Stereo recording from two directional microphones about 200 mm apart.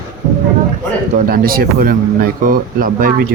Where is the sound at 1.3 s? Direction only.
45° right (ahead or behind).